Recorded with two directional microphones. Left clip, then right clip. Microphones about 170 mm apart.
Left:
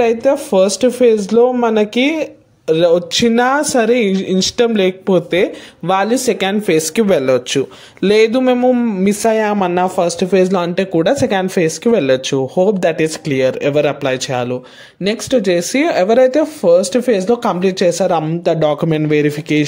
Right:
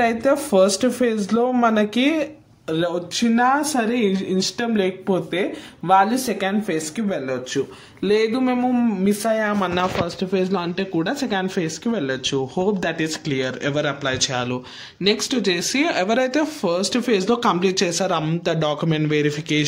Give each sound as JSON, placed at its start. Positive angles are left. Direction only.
{"t": 0.0, "sound": "speech", "side_deg": 10}
{"t": 2.7, "sound": "speech", "side_deg": 40}